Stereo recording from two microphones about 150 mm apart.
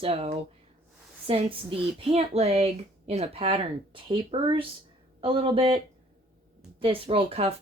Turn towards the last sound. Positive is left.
turn(degrees=-40)  # may be behind; listen again after turning